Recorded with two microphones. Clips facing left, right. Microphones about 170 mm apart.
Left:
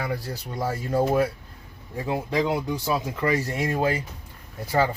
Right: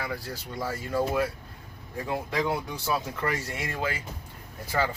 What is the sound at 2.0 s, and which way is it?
Speech, 20° left (ahead or behind).